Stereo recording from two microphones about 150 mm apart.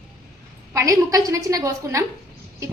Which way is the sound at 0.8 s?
20° right (ahead or behind).